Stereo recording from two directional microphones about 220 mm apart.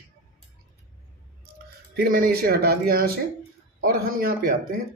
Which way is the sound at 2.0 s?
40° right (ahead or behind).